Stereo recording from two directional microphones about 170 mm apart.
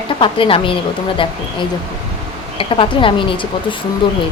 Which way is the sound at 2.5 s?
30° left (ahead or behind).